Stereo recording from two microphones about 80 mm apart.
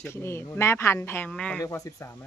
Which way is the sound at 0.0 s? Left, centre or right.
Left.